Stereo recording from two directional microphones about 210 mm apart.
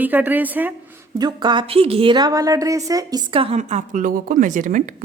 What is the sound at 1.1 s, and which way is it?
A woman's voice, 20° right (ahead or behind).